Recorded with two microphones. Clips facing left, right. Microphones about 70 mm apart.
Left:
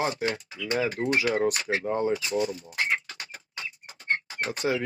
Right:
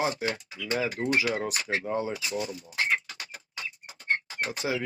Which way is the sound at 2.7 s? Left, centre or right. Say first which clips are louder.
Even; centre.